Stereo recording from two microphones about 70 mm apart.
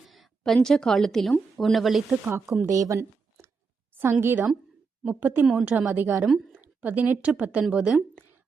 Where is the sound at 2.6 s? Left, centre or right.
Right; by 7.6 s centre.